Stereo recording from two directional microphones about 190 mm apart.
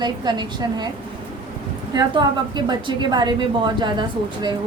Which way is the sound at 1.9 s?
25° right (ahead or behind).